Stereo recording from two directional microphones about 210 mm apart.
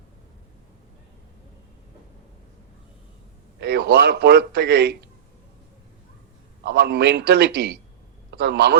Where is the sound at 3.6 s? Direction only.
55° right (ahead or behind).